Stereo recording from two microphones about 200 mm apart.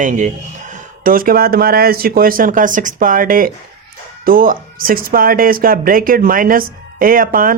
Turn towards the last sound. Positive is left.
turn(degrees=-45)  # may be behind; listen again after turning